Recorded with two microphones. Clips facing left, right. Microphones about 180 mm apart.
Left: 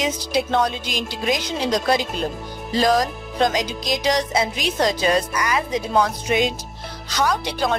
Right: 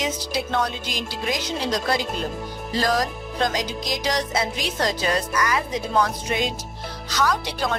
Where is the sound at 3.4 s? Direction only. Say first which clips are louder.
Left 4 dB; 20° left (ahead or behind).